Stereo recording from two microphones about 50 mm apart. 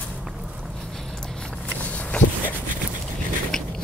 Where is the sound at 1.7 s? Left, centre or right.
Left.